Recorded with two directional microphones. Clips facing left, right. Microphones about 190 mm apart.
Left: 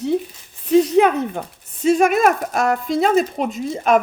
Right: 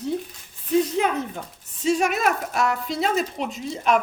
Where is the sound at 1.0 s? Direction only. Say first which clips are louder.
Left 8 dB; 60° left (ahead or behind).